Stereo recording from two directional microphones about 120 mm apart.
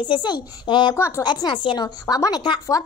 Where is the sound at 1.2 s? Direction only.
40° left (ahead or behind).